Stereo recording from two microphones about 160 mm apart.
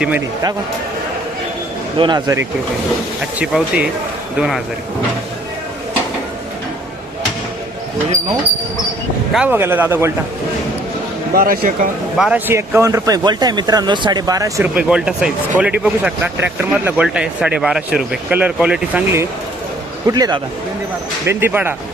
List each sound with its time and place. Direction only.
2.0 s speech: 25° right (ahead or behind)
3.3 s speech: 5° right (ahead or behind)
9.3 s speech: 10° right (ahead or behind)
11.3 s speech: 65° right (ahead or behind)
12.1 s speech: centre (ahead or behind)
12.5 s speech: 15° right (ahead or behind)
14.8 s speech: 5° right (ahead or behind); by 20.4 s 25° right (ahead or behind)
21.2 s speech: 15° right (ahead or behind)